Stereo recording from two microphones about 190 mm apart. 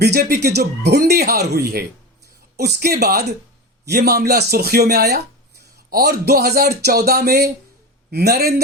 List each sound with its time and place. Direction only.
0.0 s speech: 55° right (ahead or behind)